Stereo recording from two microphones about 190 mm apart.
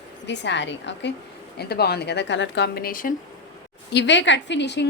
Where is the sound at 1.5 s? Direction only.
55° left (ahead or behind).